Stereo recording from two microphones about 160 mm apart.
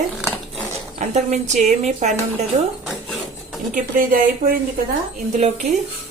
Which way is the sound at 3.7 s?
60° right (ahead or behind).